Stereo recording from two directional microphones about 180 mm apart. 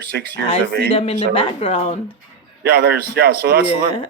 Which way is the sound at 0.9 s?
30° left (ahead or behind).